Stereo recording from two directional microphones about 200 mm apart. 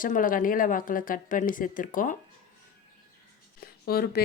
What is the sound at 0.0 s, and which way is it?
Speech, 45° left (ahead or behind).